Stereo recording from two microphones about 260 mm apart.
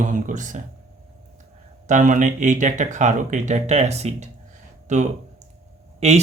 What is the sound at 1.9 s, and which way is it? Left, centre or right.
Speech, right.